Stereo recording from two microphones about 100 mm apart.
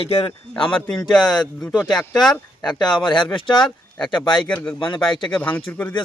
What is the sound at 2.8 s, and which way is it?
Speech, 50° left (ahead or behind).